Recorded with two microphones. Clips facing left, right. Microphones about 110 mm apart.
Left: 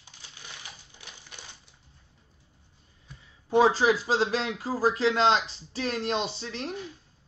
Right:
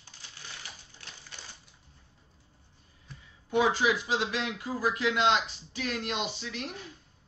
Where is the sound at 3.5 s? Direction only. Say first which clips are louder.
Left 5 dB; 35° left (ahead or behind).